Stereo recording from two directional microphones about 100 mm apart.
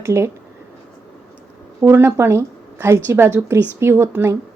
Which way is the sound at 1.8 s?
25° right (ahead or behind).